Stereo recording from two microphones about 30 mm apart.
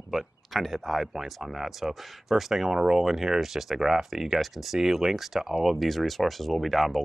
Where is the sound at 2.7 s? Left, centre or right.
Centre.